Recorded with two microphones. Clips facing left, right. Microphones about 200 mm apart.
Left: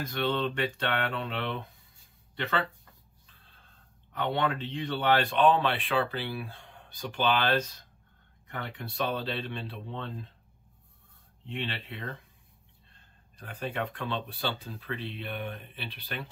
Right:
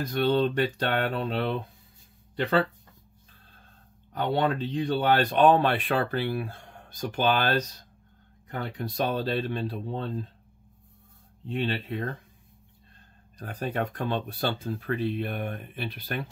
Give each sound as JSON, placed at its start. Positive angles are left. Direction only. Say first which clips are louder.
{"t": 0.0, "sound": "speech", "louder": "right 6 dB", "side_deg": -35}
{"t": 3.3, "sound": "snort", "louder": "right 3 dB", "side_deg": -45}
{"t": 4.1, "sound": "speech", "louder": "right 4 dB", "side_deg": -40}
{"t": 11.4, "sound": "speech", "louder": "right 7 dB", "side_deg": -40}
{"t": 13.4, "sound": "speech", "louder": "right 4 dB", "side_deg": -40}